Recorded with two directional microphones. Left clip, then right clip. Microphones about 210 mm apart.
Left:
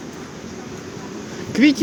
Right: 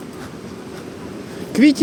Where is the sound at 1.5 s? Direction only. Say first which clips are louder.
Right 2 dB; 15° right (ahead or behind).